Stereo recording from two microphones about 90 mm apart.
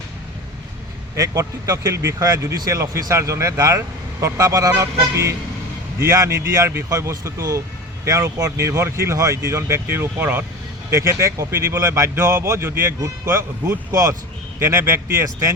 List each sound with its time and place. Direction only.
1.1 s speech: 40° right (ahead or behind); by 10.4 s 20° right (ahead or behind)
10.9 s speech: 35° right (ahead or behind)
13.9 s speech: 40° right (ahead or behind)
14.6 s speech: 25° right (ahead or behind)